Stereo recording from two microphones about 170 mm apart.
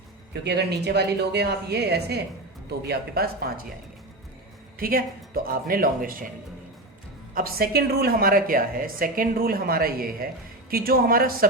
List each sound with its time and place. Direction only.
0.4 s speech: 80° right; by 3.7 s 65° right (ahead or behind)
4.8 s a woman's voice: 60° right (ahead or behind)
7.3 s a woman's voice: 60° right (ahead or behind)